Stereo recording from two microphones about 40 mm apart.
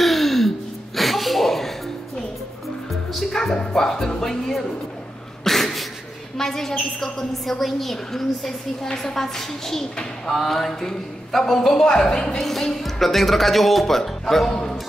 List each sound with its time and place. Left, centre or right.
0.0 s gasp: centre
0.9 s music: centre
2.9 s music: centre
3.7 s a woman's voice: centre
5.4 s cat: centre
6.3 s a woman's voice: centre
11.8 s a woman's voice: left
12.4 s speech: centre